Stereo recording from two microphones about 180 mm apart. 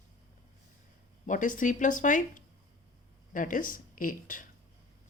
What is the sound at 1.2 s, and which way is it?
Speech, 45° left (ahead or behind).